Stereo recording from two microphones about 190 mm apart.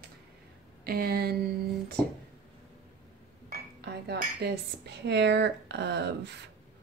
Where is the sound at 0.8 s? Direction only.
55° right (ahead or behind).